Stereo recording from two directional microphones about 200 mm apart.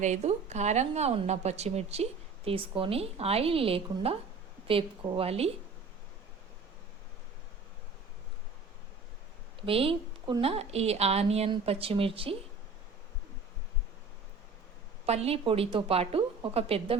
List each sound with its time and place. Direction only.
0.0 s a woman's voice: 35° right (ahead or behind)
9.6 s a woman's voice: 30° right (ahead or behind)
15.0 s a woman's voice: 30° right (ahead or behind)